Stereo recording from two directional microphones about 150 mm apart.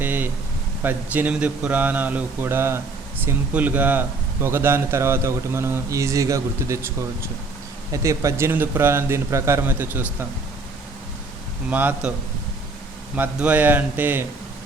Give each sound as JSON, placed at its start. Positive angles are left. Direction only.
{"t": 0.0, "sound": "a sound", "side_deg": -10}
{"t": 0.8, "sound": "speech", "side_deg": -10}
{"t": 11.7, "sound": "speech", "side_deg": -10}
{"t": 13.1, "sound": "speech", "side_deg": -10}